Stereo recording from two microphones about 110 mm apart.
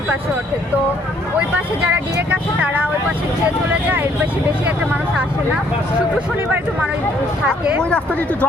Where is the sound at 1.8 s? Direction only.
15° right (ahead or behind).